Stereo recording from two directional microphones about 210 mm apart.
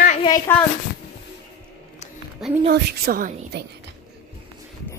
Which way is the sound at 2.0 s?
35° left (ahead or behind).